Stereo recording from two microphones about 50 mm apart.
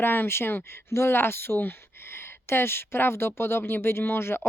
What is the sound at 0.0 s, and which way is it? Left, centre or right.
Speech, left.